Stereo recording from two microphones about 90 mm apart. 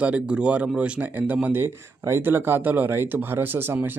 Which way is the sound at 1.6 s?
30° right (ahead or behind).